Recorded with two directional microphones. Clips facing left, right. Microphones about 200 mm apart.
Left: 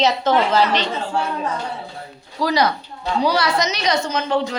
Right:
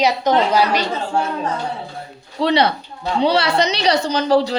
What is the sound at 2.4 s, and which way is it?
A woman's voice, 30° right (ahead or behind).